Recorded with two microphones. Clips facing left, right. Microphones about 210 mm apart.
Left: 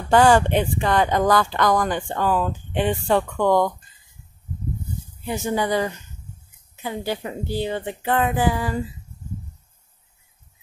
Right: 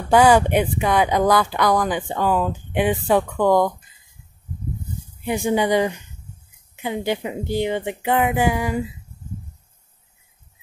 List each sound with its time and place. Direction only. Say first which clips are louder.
0.1 s speech: right 1 dB; 10° right (ahead or behind)
5.2 s speech: right 4 dB; 15° right (ahead or behind)